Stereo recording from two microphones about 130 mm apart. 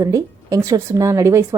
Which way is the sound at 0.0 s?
25° right (ahead or behind).